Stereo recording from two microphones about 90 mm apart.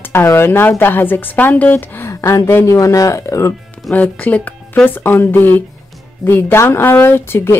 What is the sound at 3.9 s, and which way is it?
Speech, 15° left (ahead or behind).